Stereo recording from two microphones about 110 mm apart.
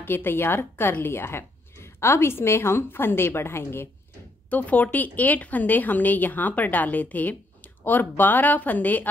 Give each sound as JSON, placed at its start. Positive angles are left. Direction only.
{"t": 0.0, "sound": "speech", "side_deg": 20}